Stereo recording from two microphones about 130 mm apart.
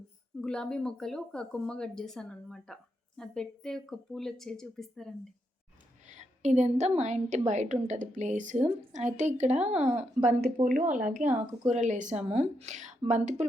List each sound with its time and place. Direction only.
0.4 s speech: 5° left (ahead or behind)
6.1 s a woman's voice: 65° right (ahead or behind); by 11.3 s 85° right
11.7 s a woman's voice: 70° right (ahead or behind)